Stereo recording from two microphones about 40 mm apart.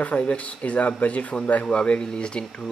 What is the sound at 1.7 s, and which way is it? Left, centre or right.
Speech, left.